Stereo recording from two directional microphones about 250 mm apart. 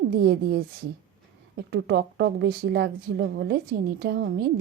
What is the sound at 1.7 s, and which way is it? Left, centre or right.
A woman's voice, right.